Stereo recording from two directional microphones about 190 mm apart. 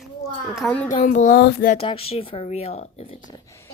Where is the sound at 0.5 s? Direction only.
5° left (ahead or behind).